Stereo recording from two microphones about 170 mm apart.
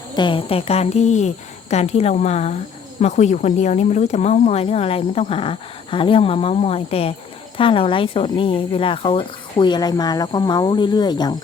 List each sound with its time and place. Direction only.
0.1 s speech: 25° left (ahead or behind)